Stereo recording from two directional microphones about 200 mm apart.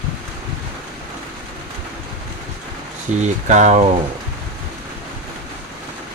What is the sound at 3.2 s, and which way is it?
Speech, 35° right (ahead or behind).